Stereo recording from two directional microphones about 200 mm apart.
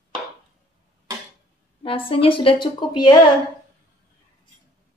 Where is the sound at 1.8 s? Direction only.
25° left (ahead or behind).